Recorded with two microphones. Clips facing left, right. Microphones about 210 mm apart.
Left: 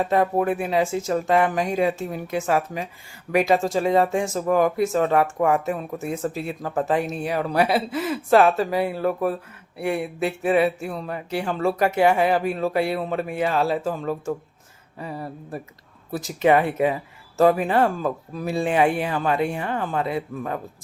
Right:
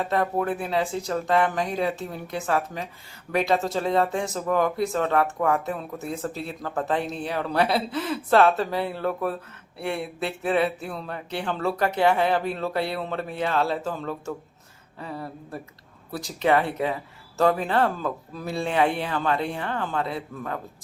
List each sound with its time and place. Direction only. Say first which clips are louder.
0.1 s speech: left 3 dB; 15° left (ahead or behind)